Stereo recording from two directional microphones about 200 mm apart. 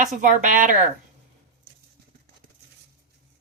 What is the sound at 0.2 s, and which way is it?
Speech, 40° right (ahead or behind).